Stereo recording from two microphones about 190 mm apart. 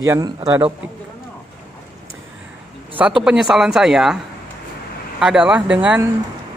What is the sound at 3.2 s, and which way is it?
Speech, 5° right (ahead or behind).